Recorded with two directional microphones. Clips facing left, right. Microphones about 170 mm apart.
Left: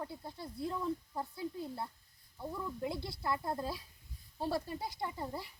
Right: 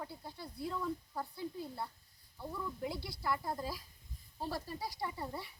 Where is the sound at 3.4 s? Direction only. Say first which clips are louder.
Left 2 dB; centre (ahead or behind).